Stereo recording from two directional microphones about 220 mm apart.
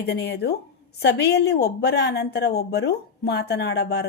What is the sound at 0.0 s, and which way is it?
A woman's voice, 50° left (ahead or behind).